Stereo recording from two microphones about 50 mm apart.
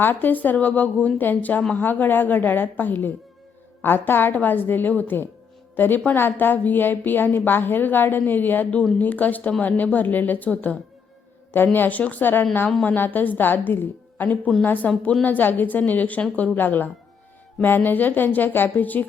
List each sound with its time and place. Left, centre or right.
0.0 s a woman's voice: left
11.5 s a woman's voice: left